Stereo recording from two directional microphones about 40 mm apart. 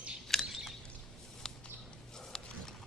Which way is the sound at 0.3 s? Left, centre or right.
Centre.